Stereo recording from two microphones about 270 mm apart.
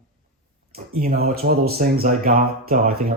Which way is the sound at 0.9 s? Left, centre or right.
Right.